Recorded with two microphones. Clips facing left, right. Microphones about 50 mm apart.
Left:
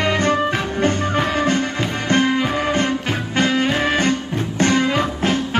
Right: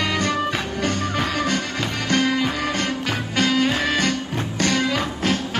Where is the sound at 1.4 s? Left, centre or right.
Left.